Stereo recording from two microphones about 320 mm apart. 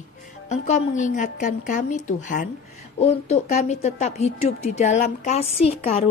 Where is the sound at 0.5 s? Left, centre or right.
Left.